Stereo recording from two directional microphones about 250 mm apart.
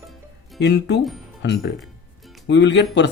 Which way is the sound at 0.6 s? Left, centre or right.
Left.